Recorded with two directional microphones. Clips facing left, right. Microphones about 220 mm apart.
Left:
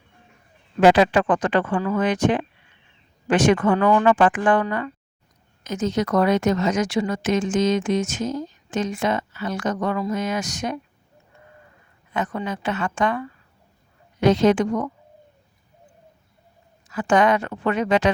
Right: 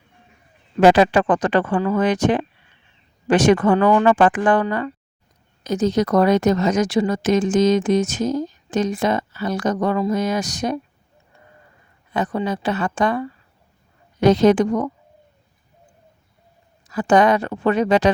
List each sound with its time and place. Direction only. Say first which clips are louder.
0.8 s speech: right 2 dB; 40° right (ahead or behind)
12.1 s speech: right 4 dB; 35° right (ahead or behind)
16.9 s speech: right 3 dB; 35° right (ahead or behind)